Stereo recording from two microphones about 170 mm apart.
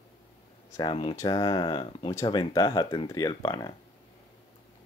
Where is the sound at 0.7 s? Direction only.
25° left (ahead or behind).